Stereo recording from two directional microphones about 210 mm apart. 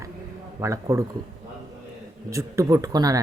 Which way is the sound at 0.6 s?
15° right (ahead or behind).